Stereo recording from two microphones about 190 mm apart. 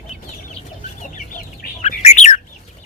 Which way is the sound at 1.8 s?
35° left (ahead or behind).